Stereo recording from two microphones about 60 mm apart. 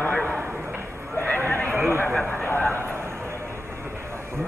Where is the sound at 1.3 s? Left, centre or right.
Left.